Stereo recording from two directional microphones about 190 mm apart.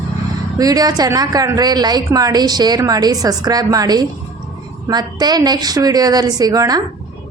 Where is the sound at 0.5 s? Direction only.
20° right (ahead or behind).